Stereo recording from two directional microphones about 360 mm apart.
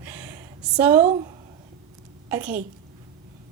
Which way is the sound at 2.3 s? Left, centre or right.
Centre.